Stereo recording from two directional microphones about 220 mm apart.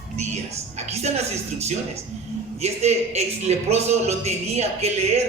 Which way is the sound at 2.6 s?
30° right (ahead or behind).